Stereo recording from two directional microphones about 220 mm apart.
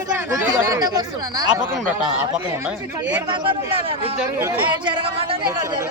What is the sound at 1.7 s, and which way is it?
Speech, centre (ahead or behind).